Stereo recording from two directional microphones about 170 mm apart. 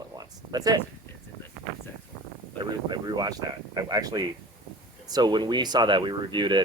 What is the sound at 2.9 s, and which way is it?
Speech, 25° right (ahead or behind).